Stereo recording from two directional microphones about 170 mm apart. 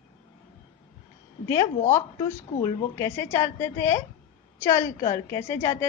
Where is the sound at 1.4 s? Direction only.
20° left (ahead or behind).